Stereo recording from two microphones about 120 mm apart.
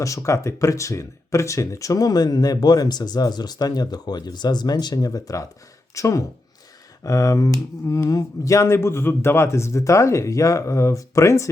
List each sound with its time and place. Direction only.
0.0 s speech: 25° left (ahead or behind)